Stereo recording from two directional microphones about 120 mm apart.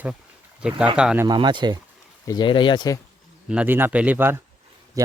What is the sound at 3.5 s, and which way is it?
Speech, 15° right (ahead or behind).